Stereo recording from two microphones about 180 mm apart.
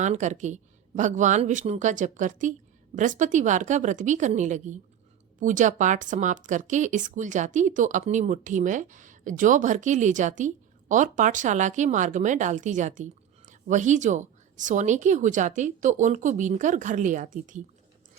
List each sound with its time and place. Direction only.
0.0 s speech: 40° right (ahead or behind)